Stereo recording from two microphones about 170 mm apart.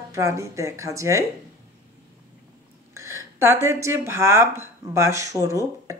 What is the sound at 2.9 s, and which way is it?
Speech, 15° right (ahead or behind).